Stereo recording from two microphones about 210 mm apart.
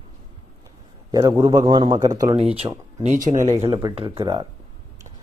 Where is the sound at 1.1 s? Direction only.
15° right (ahead or behind).